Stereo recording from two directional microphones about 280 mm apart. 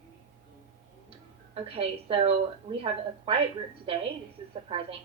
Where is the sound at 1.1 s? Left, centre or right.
Centre.